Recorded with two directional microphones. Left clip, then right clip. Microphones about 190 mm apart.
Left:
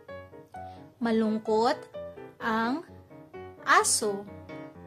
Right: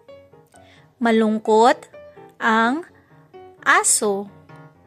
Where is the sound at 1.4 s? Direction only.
40° right (ahead or behind).